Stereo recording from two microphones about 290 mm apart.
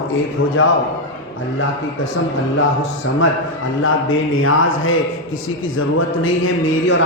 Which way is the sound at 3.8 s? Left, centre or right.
Left.